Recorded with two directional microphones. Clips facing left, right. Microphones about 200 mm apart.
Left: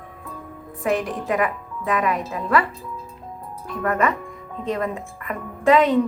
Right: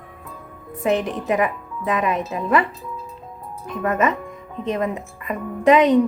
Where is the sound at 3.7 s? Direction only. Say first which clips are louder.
Right 1 dB; 20° right (ahead or behind).